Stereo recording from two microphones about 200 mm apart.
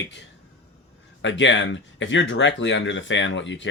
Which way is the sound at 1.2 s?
65° left (ahead or behind).